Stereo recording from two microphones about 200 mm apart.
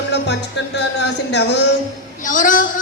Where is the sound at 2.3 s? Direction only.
40° left (ahead or behind).